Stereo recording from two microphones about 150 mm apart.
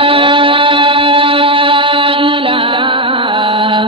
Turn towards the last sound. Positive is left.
turn(degrees=-35)  # may be behind; listen again after turning